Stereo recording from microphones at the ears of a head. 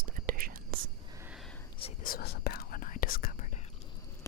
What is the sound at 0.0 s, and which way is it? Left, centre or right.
Whispering, right.